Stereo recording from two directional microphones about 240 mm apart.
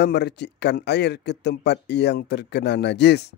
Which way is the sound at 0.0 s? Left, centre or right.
Left.